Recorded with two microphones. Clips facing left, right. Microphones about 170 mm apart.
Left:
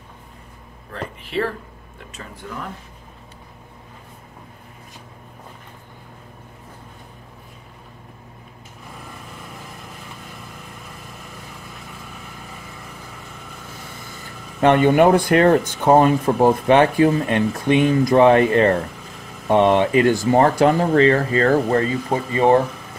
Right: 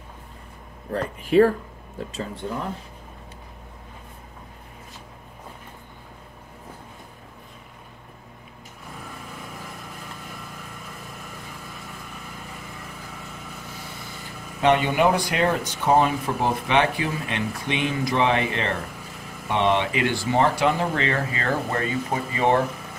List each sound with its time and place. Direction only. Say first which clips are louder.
0.9 s speech: right 8 dB; 45° right (ahead or behind)
2.0 s speech: right 7 dB; 30° right (ahead or behind)
14.6 s speech: left 6 dB; 50° left (ahead or behind); by 22.6 s 30° left (ahead or behind)